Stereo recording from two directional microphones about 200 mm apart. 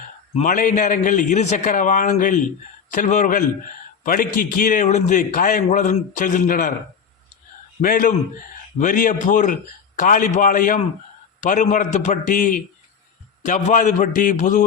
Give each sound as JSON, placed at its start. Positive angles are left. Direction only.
{"t": 0.3, "sound": "a man's voice", "side_deg": 40}
{"t": 7.8, "sound": "a man's voice", "side_deg": 45}